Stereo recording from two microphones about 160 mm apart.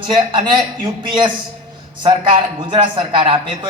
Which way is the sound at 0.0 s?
30° right (ahead or behind).